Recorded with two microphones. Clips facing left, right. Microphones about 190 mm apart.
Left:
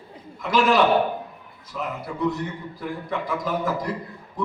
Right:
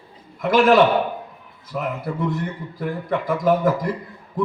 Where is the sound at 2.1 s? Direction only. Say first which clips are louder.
Left 2 dB; 55° right (ahead or behind).